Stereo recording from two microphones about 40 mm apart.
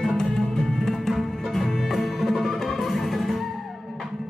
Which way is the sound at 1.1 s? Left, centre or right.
Centre.